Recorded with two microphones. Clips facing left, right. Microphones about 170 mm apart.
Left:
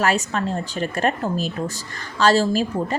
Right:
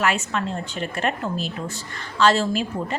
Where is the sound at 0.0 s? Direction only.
40° left (ahead or behind).